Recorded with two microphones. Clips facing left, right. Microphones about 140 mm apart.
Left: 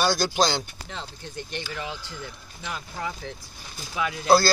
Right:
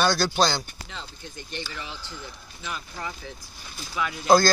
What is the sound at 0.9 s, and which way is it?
Speech, 60° left (ahead or behind).